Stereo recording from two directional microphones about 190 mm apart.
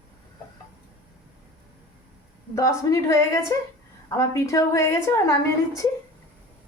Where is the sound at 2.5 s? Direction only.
15° left (ahead or behind).